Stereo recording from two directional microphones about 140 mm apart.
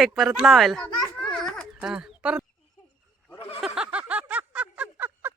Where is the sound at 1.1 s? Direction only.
5° left (ahead or behind).